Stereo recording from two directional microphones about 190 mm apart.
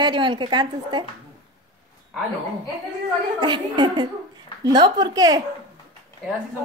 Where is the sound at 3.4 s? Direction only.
25° right (ahead or behind).